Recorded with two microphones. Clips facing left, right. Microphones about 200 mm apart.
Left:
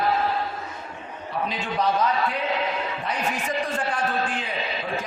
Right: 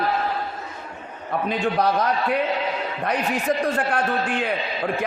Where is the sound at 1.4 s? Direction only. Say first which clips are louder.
Right 5 dB; 60° right (ahead or behind).